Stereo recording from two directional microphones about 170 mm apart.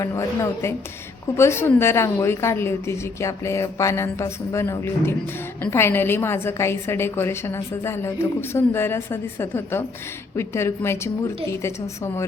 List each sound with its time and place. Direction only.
0.0 s a woman's voice: 15° left (ahead or behind)